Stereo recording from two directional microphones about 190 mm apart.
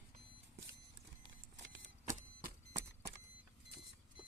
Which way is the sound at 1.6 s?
75° right (ahead or behind).